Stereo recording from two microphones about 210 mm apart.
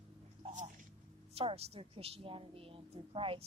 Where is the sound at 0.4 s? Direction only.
35° right (ahead or behind).